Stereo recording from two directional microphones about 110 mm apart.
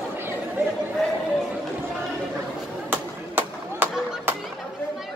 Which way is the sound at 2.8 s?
20° right (ahead or behind).